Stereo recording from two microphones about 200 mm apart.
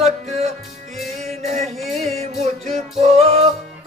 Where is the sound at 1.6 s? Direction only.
Centre (ahead or behind).